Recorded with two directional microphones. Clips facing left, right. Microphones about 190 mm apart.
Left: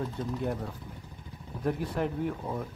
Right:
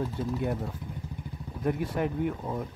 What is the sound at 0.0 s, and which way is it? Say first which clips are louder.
Speech: right 2 dB; 10° right (ahead or behind).